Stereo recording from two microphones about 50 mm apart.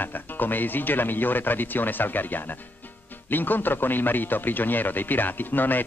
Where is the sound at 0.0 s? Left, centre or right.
Left.